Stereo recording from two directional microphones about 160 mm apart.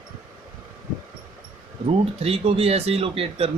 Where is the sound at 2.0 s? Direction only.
35° right (ahead or behind).